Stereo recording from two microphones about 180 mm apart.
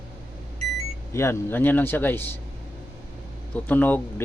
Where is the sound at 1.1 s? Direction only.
15° left (ahead or behind).